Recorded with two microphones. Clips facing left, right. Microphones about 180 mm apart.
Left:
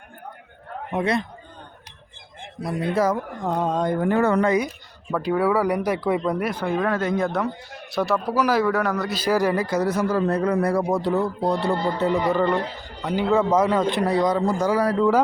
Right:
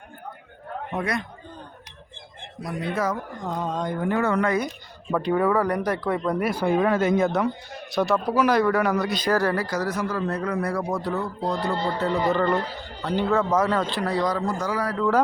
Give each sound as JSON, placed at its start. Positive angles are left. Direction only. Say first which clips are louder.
{"t": 0.9, "sound": "speech", "louder": "left 5 dB", "side_deg": 25}
{"t": 2.6, "sound": "a man's voice", "louder": "left 5 dB", "side_deg": 35}
{"t": 3.4, "sound": "a sound", "louder": "left 5 dB", "side_deg": 60}
{"t": 5.1, "sound": "a man's voice", "louder": "even", "side_deg": 0}
{"t": 6.5, "sound": "speech", "louder": "right 2 dB", "side_deg": -10}
{"t": 9.6, "sound": "a man's voice", "louder": "left 4 dB", "side_deg": 25}